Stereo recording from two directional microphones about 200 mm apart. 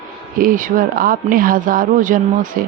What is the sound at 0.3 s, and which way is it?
Speech, 45° right (ahead or behind).